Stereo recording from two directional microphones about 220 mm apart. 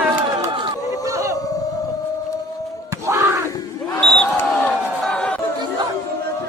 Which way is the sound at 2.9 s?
15° right (ahead or behind).